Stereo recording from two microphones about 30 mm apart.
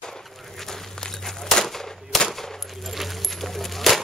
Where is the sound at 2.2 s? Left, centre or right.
Centre.